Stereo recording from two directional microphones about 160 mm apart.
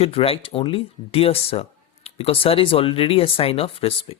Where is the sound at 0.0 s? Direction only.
35° left (ahead or behind).